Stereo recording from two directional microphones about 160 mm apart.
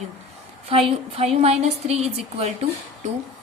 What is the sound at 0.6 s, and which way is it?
A woman's voice, 35° right (ahead or behind).